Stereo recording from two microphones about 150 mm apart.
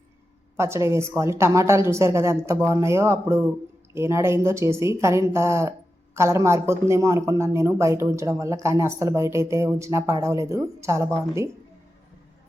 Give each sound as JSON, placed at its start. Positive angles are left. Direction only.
{"t": 0.5, "sound": "speech", "side_deg": -20}